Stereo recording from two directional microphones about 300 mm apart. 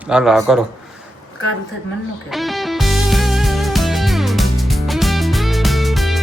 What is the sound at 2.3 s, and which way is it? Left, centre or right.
Music, centre.